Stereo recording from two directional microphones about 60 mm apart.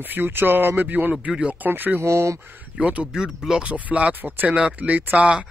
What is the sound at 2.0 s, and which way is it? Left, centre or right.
Speech, right.